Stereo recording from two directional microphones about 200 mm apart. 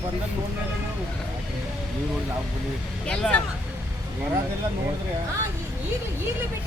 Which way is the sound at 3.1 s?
5° left (ahead or behind).